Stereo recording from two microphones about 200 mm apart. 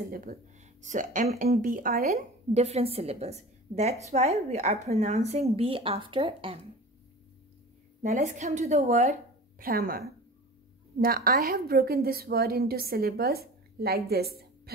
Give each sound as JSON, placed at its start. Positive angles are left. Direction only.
{"t": 0.1, "sound": "a woman's voice", "side_deg": -45}
{"t": 2.1, "sound": "speech", "side_deg": -30}
{"t": 8.0, "sound": "speech", "side_deg": -35}
{"t": 9.6, "sound": "a woman's voice", "side_deg": -45}